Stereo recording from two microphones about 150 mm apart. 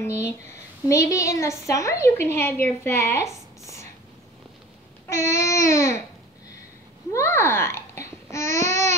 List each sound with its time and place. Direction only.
0.0 s a woman's voice: 15° left (ahead or behind)
5.3 s a woman's voice: 20° left (ahead or behind)
7.1 s a woman's voice: 15° left (ahead or behind)